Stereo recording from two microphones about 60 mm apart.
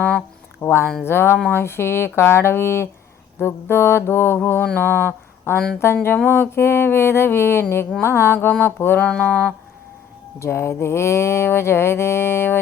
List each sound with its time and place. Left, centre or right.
0.6 s music: left
4.8 s speech: left
5.8 s music: left
9.0 s mantra: centre
10.4 s music: left